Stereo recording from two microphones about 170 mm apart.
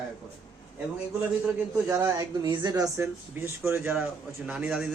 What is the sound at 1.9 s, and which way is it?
A man's voice, 15° right (ahead or behind).